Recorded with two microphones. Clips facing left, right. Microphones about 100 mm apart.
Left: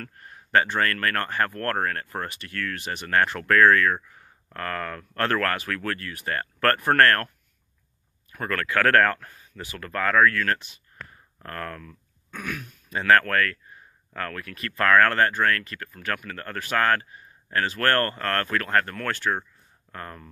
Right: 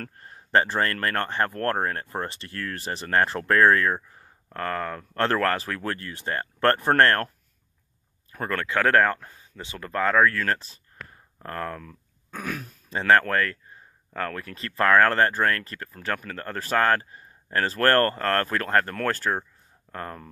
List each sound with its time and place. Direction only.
0.0 s speech: 30° right (ahead or behind)
8.3 s speech: 30° right (ahead or behind)
11.3 s speech: 25° right (ahead or behind)
11.8 s speech: 35° right (ahead or behind)